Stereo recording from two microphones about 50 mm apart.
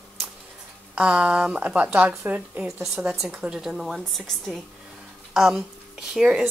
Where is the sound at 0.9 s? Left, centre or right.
Right.